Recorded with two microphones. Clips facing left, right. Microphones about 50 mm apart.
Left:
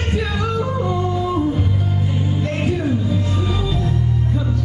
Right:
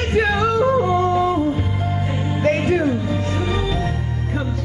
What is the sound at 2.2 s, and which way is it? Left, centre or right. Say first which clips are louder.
Music: right 6 dB; right.